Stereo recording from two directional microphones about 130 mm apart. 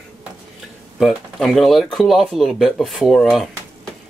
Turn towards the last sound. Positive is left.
turn(degrees=0)  # may be behind; listen again after turning